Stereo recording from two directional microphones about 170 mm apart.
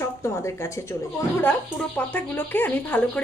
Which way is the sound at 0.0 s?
15° left (ahead or behind).